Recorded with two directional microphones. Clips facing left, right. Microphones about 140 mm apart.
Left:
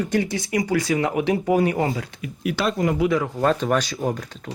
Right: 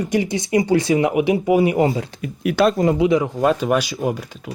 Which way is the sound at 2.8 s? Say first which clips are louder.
Right 4 dB; 25° right (ahead or behind).